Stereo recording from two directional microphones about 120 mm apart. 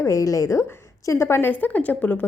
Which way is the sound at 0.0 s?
25° left (ahead or behind).